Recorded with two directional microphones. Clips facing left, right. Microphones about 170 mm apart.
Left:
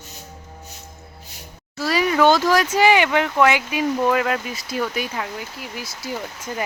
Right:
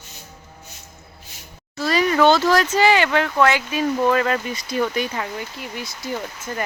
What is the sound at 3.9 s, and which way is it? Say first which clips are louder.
Speech: right 2 dB; 10° left (ahead or behind).